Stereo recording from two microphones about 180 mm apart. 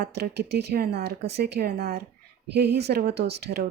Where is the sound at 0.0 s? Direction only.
65° right (ahead or behind).